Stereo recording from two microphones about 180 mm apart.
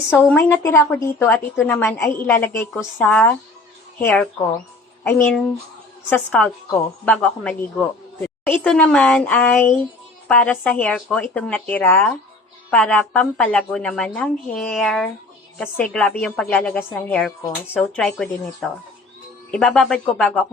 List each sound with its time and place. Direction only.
0.1 s speech: 10° left (ahead or behind)
1.5 s a woman's voice: centre (ahead or behind)
1.8 s a woman's voice: 15° left (ahead or behind)